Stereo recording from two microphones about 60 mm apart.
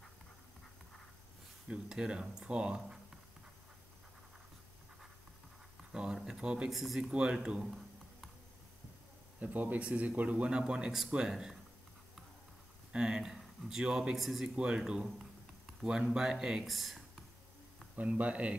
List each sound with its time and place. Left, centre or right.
1.7 s speech: centre
5.9 s speech: centre
6.7 s speech: centre
9.4 s a man's voice: right
10.7 s speech: centre
12.9 s a man's voice: centre
16.6 s speech: centre
17.9 s a man's voice: right